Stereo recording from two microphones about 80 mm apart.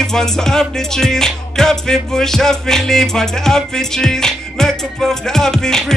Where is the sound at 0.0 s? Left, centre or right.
Centre.